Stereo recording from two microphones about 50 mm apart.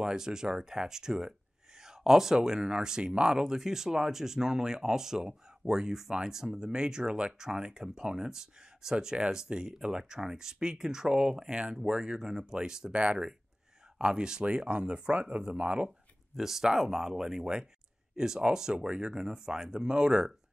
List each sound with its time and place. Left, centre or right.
0.0 s speech: centre; by 15.9 s right
16.3 s speech: centre